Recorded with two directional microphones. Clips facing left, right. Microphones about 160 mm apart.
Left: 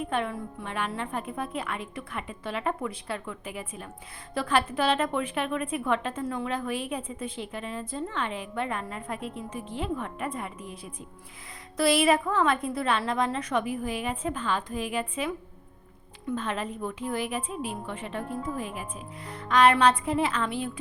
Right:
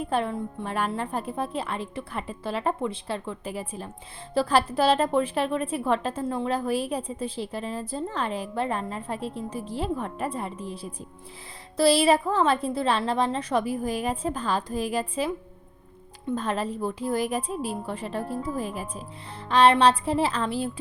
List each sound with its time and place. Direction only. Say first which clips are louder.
0.0 s a woman's voice: right 3 dB; 35° right (ahead or behind)
11.8 s a woman's voice: right 3 dB; 30° right (ahead or behind)